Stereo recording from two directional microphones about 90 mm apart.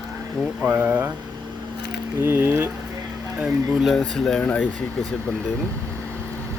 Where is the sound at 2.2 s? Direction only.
25° right (ahead or behind).